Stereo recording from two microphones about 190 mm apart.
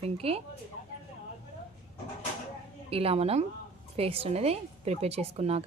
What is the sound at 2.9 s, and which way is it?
A woman's voice, 30° right (ahead or behind).